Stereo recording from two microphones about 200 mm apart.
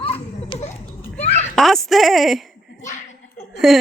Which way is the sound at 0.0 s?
30° left (ahead or behind).